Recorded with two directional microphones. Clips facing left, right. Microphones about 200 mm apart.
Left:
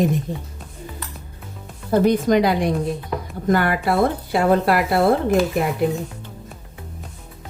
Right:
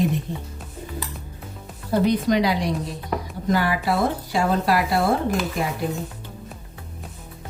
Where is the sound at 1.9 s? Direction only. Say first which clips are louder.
Left 3 dB; 50° left (ahead or behind).